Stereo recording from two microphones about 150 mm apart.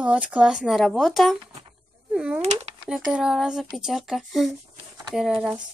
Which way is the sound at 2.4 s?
45° right (ahead or behind).